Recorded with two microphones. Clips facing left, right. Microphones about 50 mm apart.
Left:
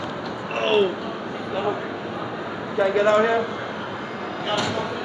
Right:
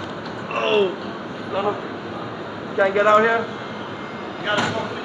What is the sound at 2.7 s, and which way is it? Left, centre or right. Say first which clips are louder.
Speech: right 3 dB; centre.